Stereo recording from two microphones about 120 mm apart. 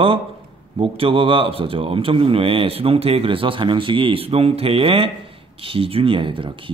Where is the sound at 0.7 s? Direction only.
50° right (ahead or behind).